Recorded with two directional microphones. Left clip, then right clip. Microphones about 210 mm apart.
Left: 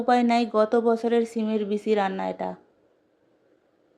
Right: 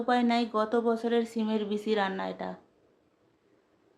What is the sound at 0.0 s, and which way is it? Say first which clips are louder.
Speech: left 6 dB; 25° left (ahead or behind).